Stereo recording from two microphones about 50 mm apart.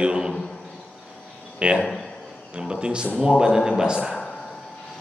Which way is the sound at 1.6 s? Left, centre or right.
Right.